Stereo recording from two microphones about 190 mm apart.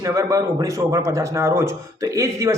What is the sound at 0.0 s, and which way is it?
A man's voice, 15° right (ahead or behind).